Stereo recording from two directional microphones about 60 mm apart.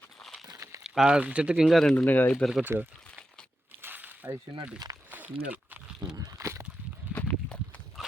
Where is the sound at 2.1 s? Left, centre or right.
Left.